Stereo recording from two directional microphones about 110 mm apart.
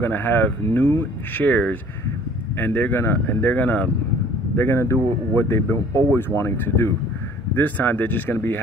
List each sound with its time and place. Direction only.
0.0 s speech: 15° left (ahead or behind)